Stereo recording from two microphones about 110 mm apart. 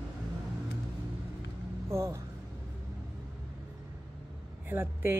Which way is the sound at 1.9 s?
25° right (ahead or behind).